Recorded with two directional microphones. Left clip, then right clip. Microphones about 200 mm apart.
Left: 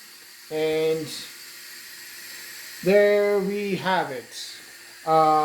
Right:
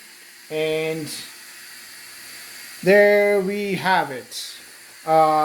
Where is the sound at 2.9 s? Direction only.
50° right (ahead or behind).